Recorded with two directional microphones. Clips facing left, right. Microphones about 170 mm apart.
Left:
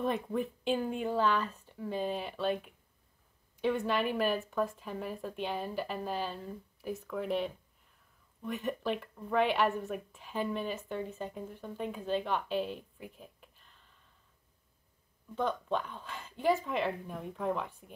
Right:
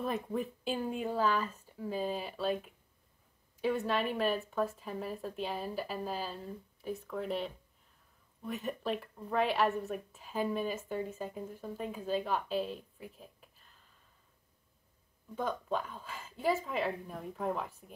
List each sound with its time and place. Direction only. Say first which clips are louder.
0.0 s speech: left 2 dB; 5° right (ahead or behind)
15.3 s speech: left 2 dB; 5° right (ahead or behind)